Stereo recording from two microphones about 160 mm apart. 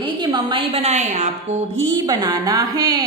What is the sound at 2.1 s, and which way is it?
Speech, 25° right (ahead or behind).